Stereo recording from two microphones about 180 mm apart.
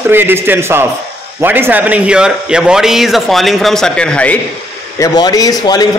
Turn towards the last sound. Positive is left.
turn(degrees=20)  # may be behind; listen again after turning